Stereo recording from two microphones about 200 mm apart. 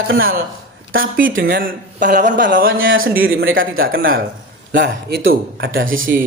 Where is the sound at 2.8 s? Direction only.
90° right.